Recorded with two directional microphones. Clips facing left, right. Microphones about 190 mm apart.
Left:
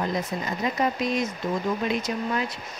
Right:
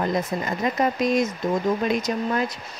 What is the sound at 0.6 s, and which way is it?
Speech, 50° right (ahead or behind).